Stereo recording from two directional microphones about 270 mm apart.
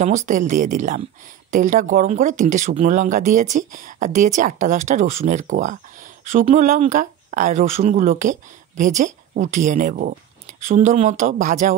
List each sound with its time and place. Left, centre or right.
0.0 s speech: right